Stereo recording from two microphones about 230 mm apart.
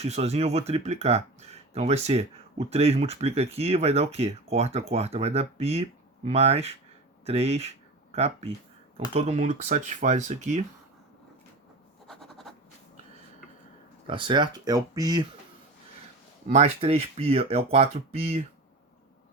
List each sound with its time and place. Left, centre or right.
0.0 s speech: right
12.0 s a sound: centre
14.1 s speech: right
16.5 s speech: right